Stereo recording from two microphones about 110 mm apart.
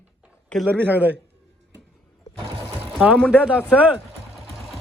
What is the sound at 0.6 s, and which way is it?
Speech, 15° right (ahead or behind).